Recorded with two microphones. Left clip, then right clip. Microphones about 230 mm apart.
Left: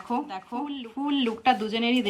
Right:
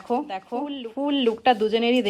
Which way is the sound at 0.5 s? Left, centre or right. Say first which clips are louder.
Right 4 dB; right.